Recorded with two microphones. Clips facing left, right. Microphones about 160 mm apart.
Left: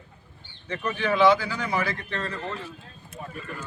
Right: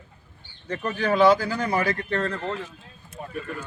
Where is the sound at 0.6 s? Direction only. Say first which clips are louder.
Right 2 dB; 40° right (ahead or behind).